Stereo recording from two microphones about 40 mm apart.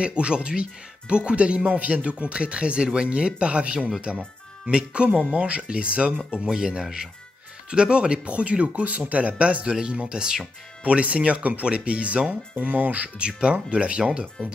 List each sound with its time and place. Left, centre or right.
0.0 s speech: right
9.7 s speech: right
10.8 s speech: right
13.4 s speech: right